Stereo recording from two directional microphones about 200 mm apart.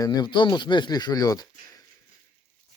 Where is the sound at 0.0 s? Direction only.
20° left (ahead or behind).